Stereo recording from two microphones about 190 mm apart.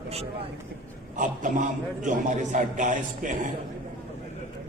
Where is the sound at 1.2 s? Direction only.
45° right (ahead or behind).